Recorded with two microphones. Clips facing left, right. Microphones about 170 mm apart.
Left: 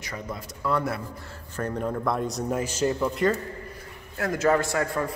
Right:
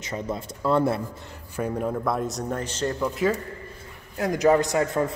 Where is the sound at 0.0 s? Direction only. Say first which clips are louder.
Right 5 dB; 25° right (ahead or behind).